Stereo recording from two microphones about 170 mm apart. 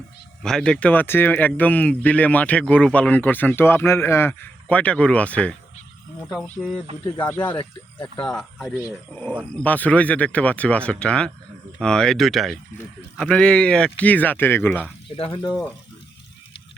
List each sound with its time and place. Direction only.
0.4 s speech: 5° left (ahead or behind)
7.3 s speech: 25° left (ahead or behind)
8.2 s speech: 5° left (ahead or behind)
15.1 s speech: 30° left (ahead or behind)
15.4 s speech: 10° left (ahead or behind)